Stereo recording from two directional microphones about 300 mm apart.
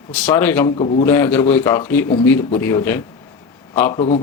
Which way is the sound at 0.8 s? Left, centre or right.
Centre.